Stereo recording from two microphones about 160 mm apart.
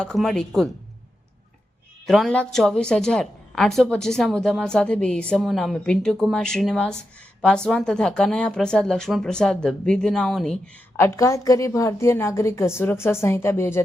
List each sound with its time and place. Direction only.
0.0 s a woman's voice: centre (ahead or behind)
2.0 s a woman's voice: centre (ahead or behind)
10.9 s a woman's voice: 15° left (ahead or behind)